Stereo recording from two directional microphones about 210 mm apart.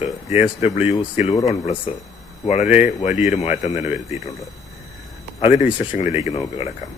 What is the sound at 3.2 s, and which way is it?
Speech, 30° left (ahead or behind).